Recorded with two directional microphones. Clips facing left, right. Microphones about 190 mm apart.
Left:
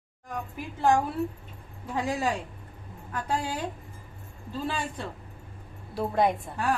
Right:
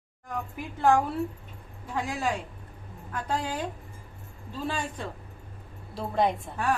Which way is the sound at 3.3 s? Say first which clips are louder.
Even; 10° left (ahead or behind).